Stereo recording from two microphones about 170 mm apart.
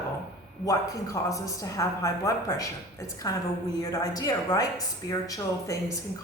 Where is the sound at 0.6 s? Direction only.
20° left (ahead or behind).